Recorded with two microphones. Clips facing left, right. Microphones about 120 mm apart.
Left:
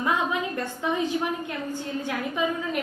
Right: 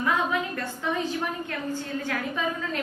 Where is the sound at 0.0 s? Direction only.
20° left (ahead or behind).